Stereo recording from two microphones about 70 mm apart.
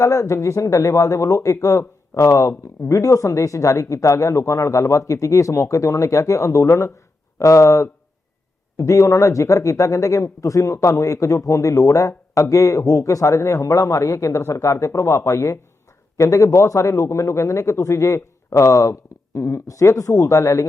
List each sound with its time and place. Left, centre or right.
0.0 s speech: left